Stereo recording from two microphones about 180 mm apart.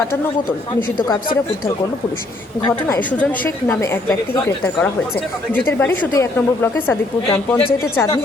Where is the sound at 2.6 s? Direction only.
15° left (ahead or behind).